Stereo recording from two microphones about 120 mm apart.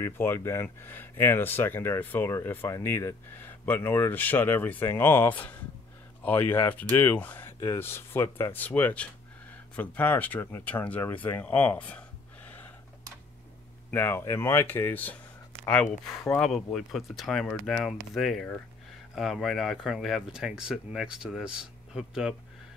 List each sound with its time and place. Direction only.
0.0 s speech: 20° left (ahead or behind)
13.8 s speech: 15° left (ahead or behind); by 22.3 s 5° right (ahead or behind)